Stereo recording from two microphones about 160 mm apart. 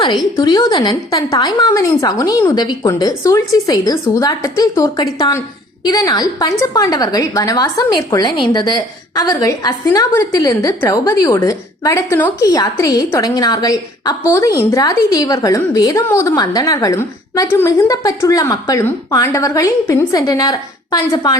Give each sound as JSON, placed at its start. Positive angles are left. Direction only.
{"t": 0.3, "sound": "a woman's voice", "side_deg": 25}